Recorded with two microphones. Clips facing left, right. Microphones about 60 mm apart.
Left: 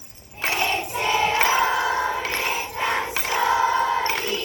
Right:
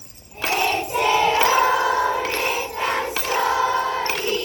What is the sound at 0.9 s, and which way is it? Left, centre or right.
Crowd, right.